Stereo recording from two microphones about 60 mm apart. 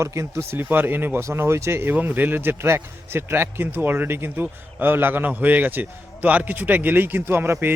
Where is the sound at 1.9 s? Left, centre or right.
Right.